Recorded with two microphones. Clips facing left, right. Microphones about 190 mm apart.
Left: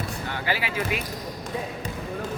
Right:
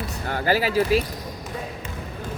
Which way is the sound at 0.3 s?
45° right (ahead or behind).